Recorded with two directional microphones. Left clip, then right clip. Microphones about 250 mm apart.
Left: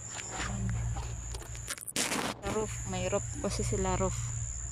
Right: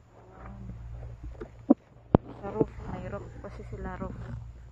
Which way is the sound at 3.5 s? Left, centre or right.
Centre.